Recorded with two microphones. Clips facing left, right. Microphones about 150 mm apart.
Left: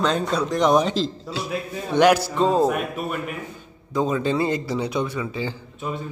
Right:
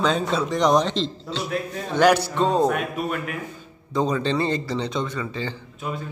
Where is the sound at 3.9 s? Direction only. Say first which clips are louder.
Left 1 dB; 5° left (ahead or behind).